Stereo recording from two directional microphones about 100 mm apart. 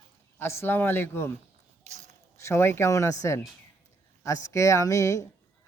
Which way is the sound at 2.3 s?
25° left (ahead or behind).